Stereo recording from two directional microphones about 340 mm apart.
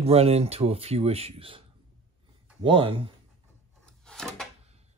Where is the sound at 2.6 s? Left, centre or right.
Centre.